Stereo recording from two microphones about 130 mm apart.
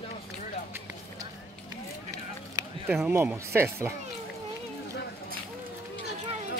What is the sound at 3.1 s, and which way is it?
Speech, 15° right (ahead or behind).